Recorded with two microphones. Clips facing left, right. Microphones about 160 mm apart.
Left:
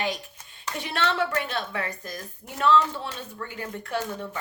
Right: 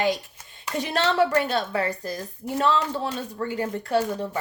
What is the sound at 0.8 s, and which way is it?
A woman's voice, 40° right (ahead or behind).